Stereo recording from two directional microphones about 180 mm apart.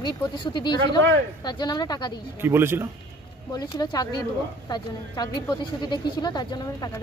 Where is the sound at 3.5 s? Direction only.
25° left (ahead or behind).